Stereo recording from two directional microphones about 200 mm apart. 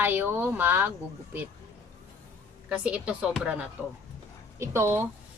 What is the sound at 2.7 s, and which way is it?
A woman's voice, 5° right (ahead or behind).